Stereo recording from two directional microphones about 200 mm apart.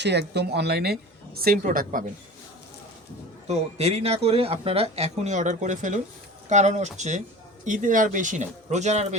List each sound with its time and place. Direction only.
0.0 s speech: 55° right (ahead or behind)
3.4 s speech: 30° right (ahead or behind)